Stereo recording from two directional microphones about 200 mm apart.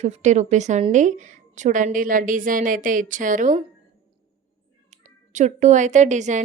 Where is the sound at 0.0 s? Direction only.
35° right (ahead or behind).